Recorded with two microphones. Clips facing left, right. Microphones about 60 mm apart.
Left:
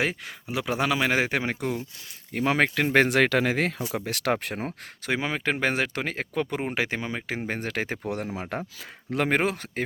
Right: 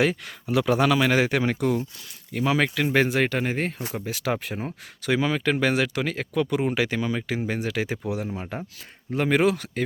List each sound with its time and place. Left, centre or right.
0.0 s a man's voice: left
2.3 s speech: left
2.9 s speech: left
3.9 s speech: left
5.0 s speech: left
8.4 s speech: left
9.3 s speech: left